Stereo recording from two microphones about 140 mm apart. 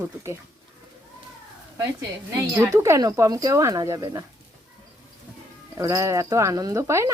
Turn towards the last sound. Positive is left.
turn(degrees=-20)  # may be behind; listen again after turning